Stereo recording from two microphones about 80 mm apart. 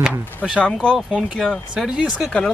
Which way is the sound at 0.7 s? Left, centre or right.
Centre.